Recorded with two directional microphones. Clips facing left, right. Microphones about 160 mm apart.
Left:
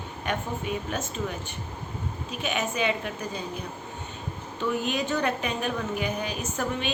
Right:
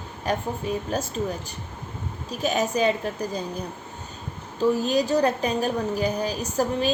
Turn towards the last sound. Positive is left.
turn(degrees=-35)  # may be behind; listen again after turning